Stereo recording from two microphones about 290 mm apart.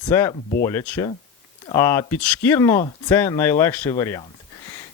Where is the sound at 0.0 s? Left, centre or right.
Centre.